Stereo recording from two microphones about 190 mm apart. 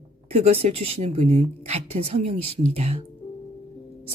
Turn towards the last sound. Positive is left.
turn(degrees=-30)  # may be behind; listen again after turning